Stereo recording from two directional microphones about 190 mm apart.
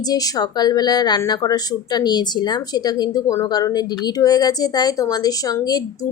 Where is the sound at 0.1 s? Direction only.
20° left (ahead or behind).